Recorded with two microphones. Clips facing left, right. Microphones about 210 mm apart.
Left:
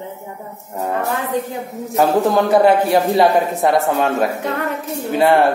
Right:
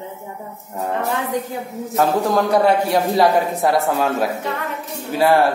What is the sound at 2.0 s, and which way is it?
Speech, centre (ahead or behind).